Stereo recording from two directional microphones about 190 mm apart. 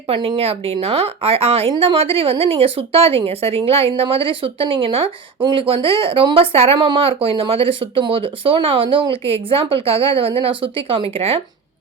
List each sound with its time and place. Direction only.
0.1 s speech: 30° right (ahead or behind)